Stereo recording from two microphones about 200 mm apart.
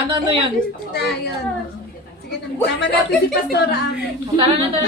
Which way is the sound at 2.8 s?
55° left (ahead or behind).